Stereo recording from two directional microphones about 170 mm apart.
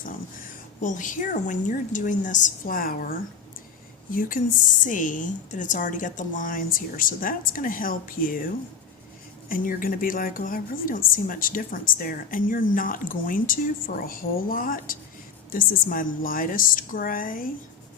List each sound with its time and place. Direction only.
0.8 s speech: 50° left (ahead or behind)
9.5 s a woman's voice: 55° left (ahead or behind)